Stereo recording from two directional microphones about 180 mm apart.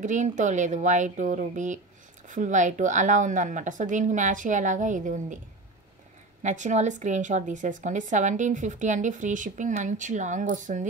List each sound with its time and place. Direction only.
0.0 s a woman's voice: 45° right (ahead or behind)
6.4 s a woman's voice: 40° right (ahead or behind)